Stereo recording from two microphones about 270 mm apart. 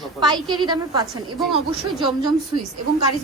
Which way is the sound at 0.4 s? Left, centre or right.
Centre.